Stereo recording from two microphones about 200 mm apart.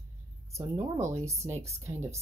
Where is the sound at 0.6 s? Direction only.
15° right (ahead or behind).